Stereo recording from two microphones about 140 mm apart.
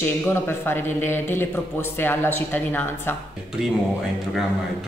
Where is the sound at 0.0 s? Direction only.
15° left (ahead or behind).